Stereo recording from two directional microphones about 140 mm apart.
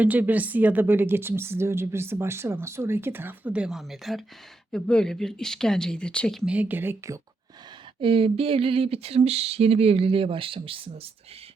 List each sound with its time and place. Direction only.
0.0 s a woman's voice: 10° right (ahead or behind); by 6.4 s 5° left (ahead or behind)
6.4 s a woman's voice: 10° right (ahead or behind)
8.0 s speech: 40° right (ahead or behind)